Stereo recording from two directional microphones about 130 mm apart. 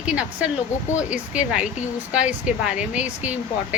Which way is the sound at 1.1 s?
10° right (ahead or behind).